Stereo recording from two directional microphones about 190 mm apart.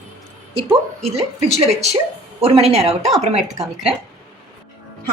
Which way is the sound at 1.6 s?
35° right (ahead or behind).